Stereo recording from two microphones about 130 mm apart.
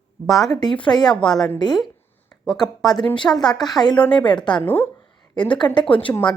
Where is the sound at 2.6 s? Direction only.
30° left (ahead or behind).